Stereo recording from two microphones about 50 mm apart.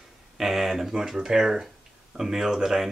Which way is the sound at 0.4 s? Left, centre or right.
Centre.